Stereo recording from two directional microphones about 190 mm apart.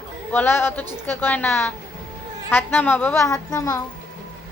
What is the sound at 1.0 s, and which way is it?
A woman's voice, 10° left (ahead or behind).